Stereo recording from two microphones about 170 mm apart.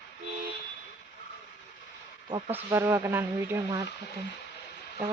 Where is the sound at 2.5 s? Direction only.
15° right (ahead or behind).